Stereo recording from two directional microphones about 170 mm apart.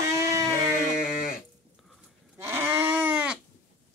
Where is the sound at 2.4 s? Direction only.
15° right (ahead or behind).